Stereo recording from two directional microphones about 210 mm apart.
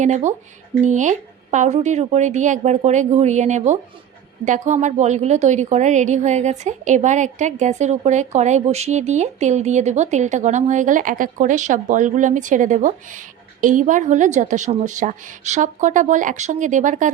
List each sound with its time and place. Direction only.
0.0 s a woman's voice: 35° right (ahead or behind)